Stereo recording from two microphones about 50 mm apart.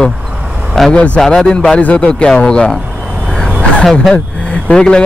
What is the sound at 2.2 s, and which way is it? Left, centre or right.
Speech, centre.